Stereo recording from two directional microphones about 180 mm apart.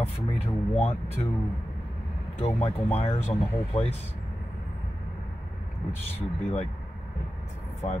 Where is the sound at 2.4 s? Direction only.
35° left (ahead or behind).